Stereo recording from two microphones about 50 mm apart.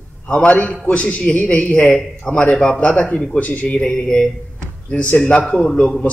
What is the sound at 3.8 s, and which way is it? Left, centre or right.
A man's voice, centre.